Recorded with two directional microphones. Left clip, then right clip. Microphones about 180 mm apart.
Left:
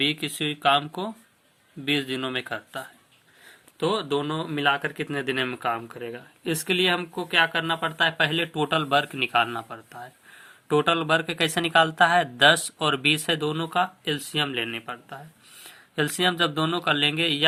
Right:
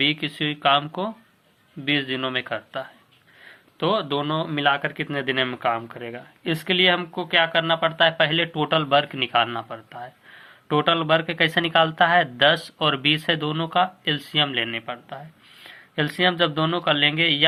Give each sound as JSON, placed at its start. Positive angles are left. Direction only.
{"t": 0.0, "sound": "speech", "side_deg": 35}